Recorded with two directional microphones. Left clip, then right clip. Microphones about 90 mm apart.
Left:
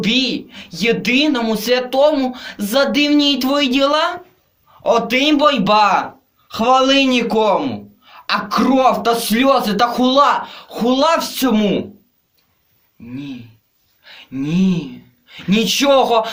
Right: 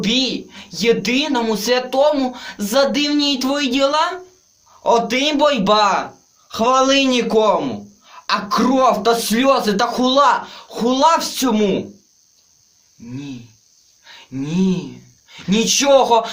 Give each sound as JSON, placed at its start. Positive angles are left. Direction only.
{"t": 0.0, "sound": "a man's voice", "side_deg": -40}
{"t": 14.0, "sound": "speech", "side_deg": -30}